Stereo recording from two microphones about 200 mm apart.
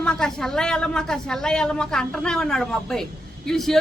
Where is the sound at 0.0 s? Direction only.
5° left (ahead or behind).